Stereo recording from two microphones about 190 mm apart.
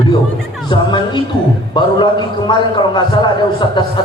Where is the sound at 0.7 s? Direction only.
25° left (ahead or behind).